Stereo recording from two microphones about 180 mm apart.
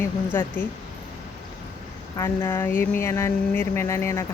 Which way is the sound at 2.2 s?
15° left (ahead or behind).